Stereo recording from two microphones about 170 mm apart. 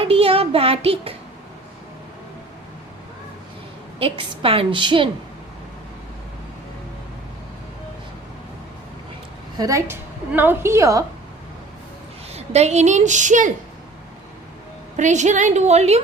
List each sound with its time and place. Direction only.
0.0 s a child's voice: 35° right (ahead or behind)
4.0 s a woman's voice: 30° right (ahead or behind)
9.6 s a woman's voice: 20° right (ahead or behind)
12.3 s a woman's voice: 40° right (ahead or behind)
14.9 s a woman's voice: 45° right (ahead or behind)